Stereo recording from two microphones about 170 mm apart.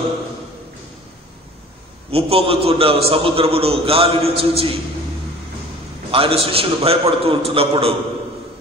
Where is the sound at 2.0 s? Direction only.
35° right (ahead or behind).